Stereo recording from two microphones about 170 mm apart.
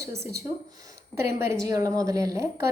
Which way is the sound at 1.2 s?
15° right (ahead or behind).